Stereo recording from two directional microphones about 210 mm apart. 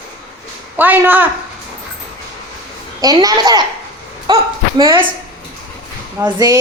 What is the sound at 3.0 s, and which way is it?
A woman's voice, 20° right (ahead or behind).